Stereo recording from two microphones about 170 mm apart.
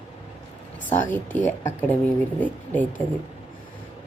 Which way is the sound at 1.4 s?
45° left (ahead or behind).